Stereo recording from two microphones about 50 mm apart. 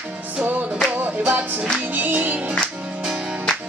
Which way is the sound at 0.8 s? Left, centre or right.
Right.